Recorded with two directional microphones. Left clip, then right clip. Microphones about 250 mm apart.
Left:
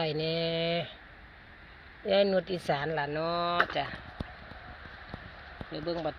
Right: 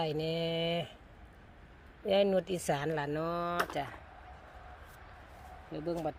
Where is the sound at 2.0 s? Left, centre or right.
Centre.